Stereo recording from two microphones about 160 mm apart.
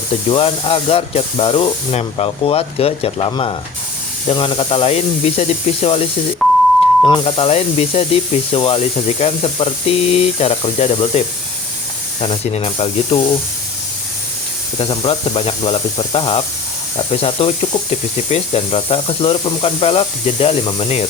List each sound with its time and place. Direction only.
0.3 s speech: 35° left (ahead or behind)
6.4 s beep: centre (ahead or behind)
7.0 s speech: 30° left (ahead or behind)
12.2 s speech: 35° left (ahead or behind)
14.8 s speech: 35° left (ahead or behind)